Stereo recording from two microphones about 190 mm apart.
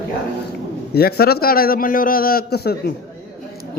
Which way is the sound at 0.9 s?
55° left (ahead or behind).